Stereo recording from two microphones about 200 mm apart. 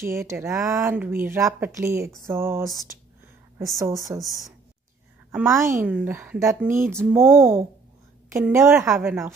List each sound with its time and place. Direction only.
0.0 s speech: 15° right (ahead or behind)
5.3 s speech: 10° right (ahead or behind)